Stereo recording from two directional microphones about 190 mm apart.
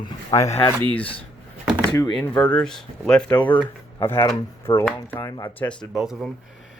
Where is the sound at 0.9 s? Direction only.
5° left (ahead or behind).